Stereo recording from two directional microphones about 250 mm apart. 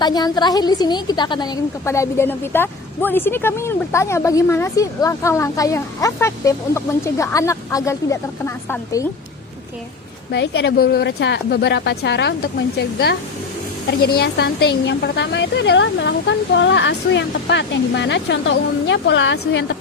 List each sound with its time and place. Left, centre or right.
0.0 s a woman's voice: centre
10.3 s a woman's voice: left